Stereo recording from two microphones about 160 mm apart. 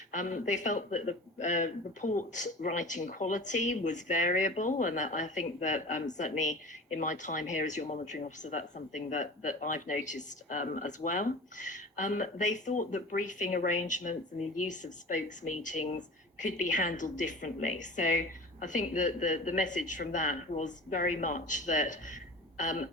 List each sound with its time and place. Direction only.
0.1 s speech: 55° left (ahead or behind)